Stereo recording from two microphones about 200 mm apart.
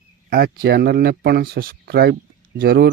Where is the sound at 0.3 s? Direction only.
50° right (ahead or behind).